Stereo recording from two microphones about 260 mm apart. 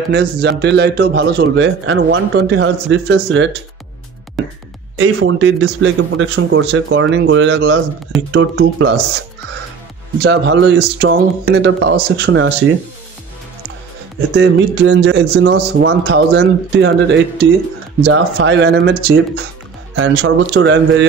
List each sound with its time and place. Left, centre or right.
0.1 s a man's voice: right
4.9 s a man's voice: right
10.2 s a man's voice: right
14.3 s a man's voice: right
20.0 s a man's voice: right